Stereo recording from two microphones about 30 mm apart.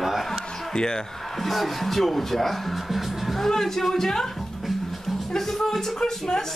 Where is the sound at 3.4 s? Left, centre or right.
Centre.